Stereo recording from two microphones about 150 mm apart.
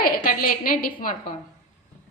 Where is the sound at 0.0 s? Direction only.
70° left (ahead or behind).